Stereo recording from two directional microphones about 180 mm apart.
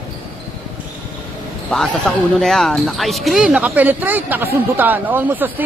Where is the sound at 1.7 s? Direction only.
5° left (ahead or behind).